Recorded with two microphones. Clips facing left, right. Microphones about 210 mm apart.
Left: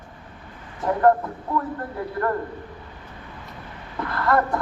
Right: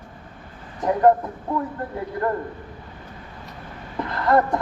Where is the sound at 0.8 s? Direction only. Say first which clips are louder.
Right 1 dB; 15° right (ahead or behind).